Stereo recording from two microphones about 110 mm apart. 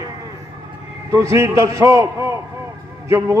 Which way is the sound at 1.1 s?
25° right (ahead or behind).